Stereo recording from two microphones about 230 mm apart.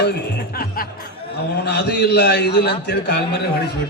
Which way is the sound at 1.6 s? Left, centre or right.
Left.